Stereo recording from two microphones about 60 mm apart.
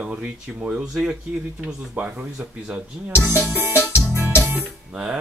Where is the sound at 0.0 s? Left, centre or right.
Right.